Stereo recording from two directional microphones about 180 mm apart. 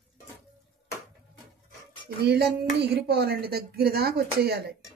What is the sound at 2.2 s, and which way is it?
Speech, 65° right (ahead or behind).